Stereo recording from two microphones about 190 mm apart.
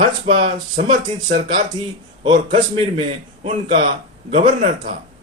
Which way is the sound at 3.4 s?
40° right (ahead or behind).